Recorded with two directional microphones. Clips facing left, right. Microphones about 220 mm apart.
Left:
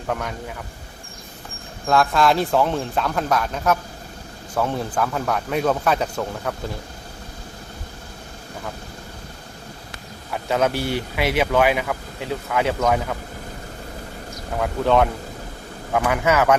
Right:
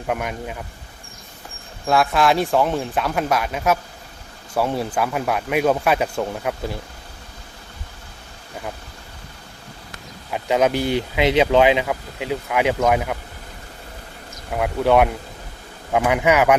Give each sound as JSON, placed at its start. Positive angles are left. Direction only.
{"t": 0.1, "sound": "speech", "side_deg": -15}
{"t": 1.9, "sound": "speech", "side_deg": -5}
{"t": 10.3, "sound": "speech", "side_deg": -15}
{"t": 14.5, "sound": "speech", "side_deg": -10}